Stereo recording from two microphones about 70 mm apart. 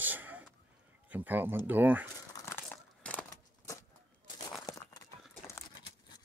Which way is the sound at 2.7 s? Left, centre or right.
Centre.